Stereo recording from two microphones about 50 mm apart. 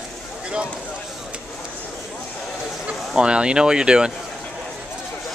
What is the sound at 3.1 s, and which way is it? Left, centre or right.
Speech, centre.